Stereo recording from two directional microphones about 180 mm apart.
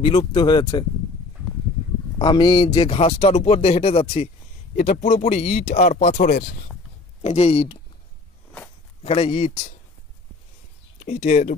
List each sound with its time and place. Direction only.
0.0 s speech: 25° left (ahead or behind)
2.1 s a man's voice: 25° left (ahead or behind); by 6.5 s 50° left (ahead or behind)
7.2 s a man's voice: 35° left (ahead or behind)
9.0 s a man's voice: 35° left (ahead or behind)
11.0 s speech: 40° left (ahead or behind)